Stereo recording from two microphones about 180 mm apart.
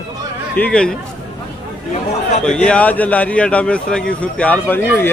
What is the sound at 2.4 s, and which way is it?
A man's voice, 5° left (ahead or behind).